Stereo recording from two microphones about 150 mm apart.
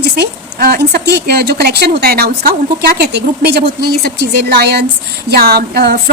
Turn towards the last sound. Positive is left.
turn(degrees=-90)